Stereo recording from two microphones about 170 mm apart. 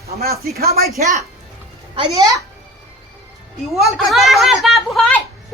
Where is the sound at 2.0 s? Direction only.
20° right (ahead or behind).